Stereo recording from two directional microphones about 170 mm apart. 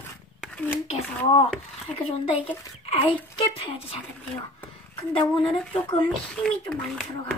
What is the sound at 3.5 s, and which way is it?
Speech, 35° left (ahead or behind).